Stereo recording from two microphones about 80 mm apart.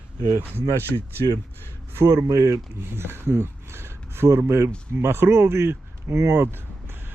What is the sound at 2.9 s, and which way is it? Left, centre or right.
Speech, right.